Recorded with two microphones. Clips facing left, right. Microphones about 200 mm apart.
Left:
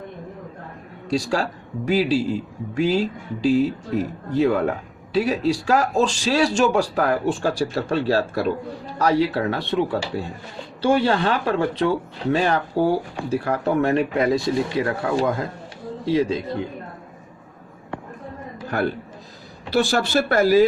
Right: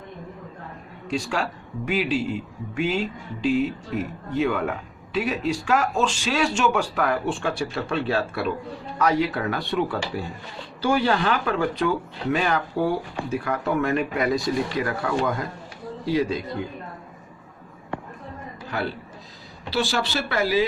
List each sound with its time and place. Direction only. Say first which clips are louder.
1.1 s speech: left 4 dB; 35° left (ahead or behind)
18.7 s speech: left 5 dB; 50° left (ahead or behind)